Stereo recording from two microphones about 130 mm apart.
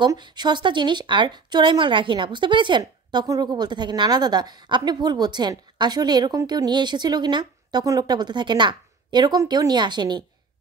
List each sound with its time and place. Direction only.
0.0 s a woman's voice: 35° right (ahead or behind)